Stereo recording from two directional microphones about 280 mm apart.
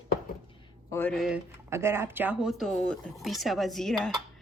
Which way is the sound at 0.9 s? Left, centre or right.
Centre.